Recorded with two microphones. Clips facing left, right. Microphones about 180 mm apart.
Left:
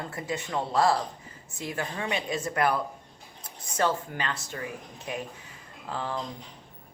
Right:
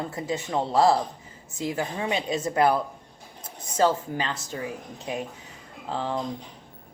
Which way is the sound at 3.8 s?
25° right (ahead or behind).